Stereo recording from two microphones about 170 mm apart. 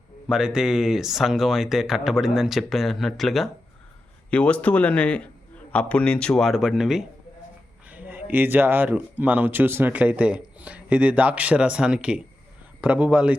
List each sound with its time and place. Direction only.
0.3 s a man's voice: 5° right (ahead or behind)